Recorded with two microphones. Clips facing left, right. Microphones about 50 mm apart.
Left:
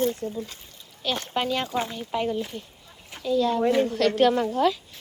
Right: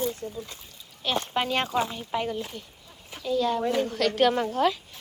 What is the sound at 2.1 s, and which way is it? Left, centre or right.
Speech, centre.